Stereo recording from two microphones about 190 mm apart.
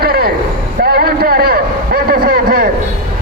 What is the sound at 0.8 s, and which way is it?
Vehicle, 55° right (ahead or behind).